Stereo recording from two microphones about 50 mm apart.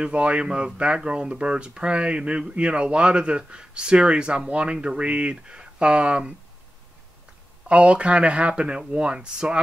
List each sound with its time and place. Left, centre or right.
0.0 s speech: right
7.6 s speech: right